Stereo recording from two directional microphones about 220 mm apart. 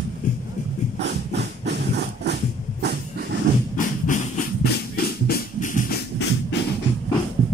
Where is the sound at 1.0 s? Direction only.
50° right (ahead or behind).